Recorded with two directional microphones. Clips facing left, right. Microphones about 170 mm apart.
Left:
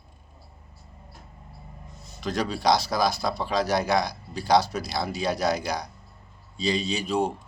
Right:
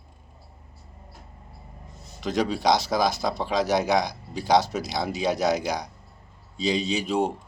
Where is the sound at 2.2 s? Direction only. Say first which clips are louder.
Right 1 dB; 20° right (ahead or behind).